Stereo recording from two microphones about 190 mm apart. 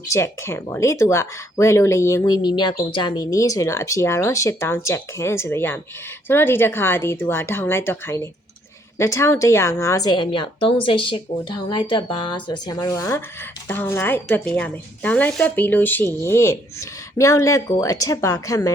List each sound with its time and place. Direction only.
0.1 s a woman's voice: 15° left (ahead or behind)